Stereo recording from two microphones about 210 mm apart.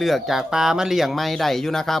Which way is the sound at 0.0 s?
Centre (ahead or behind).